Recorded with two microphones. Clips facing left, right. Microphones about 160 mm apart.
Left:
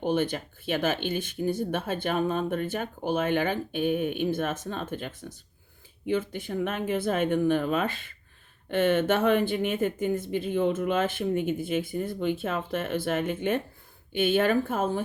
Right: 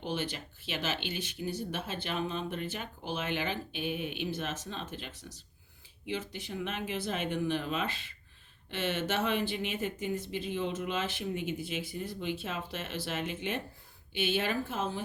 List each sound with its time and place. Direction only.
0.0 s speech: 50° left (ahead or behind)